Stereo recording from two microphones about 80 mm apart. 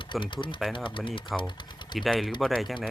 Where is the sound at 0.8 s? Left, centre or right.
Left.